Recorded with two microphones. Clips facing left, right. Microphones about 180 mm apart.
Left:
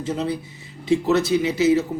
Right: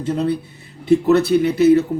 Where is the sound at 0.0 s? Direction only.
60° right (ahead or behind).